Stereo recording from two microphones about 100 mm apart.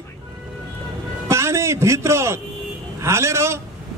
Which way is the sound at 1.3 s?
25° right (ahead or behind).